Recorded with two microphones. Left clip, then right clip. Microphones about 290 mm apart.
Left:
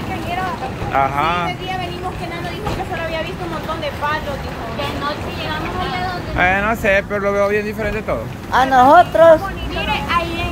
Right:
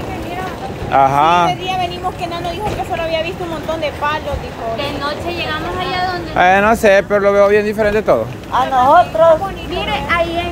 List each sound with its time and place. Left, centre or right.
0.9 s speech: right
3.8 s speech: right
6.3 s speech: centre
8.5 s speech: left
9.8 s vehicle: centre